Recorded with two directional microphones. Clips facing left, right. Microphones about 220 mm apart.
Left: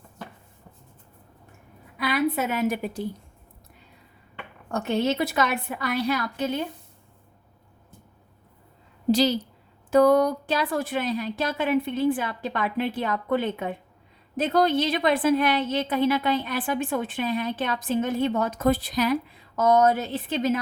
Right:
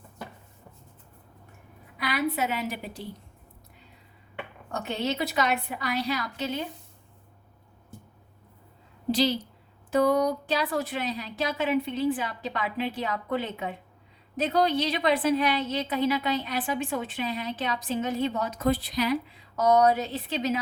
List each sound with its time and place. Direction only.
2.3 s a woman's voice: 50° left (ahead or behind)
4.7 s a woman's voice: 50° left (ahead or behind)
9.9 s a woman's voice: 50° left (ahead or behind)